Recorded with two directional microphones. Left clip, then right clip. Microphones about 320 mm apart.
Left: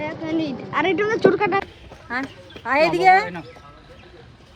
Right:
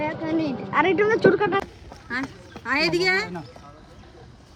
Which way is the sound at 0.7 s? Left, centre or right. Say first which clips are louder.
Right 1 dB; centre.